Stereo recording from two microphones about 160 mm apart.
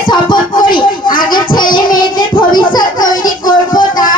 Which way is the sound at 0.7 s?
60° left (ahead or behind).